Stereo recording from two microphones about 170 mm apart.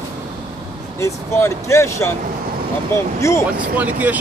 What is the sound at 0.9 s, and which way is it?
Speech, 15° left (ahead or behind).